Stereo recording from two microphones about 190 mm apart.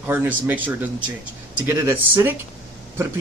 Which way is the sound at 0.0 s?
10° right (ahead or behind).